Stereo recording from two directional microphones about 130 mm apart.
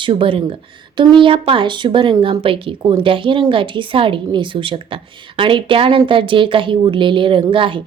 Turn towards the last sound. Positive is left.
turn(degrees=-40)  # may be behind; listen again after turning